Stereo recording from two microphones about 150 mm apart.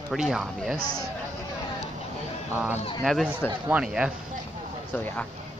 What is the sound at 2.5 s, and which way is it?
Speech, 15° right (ahead or behind).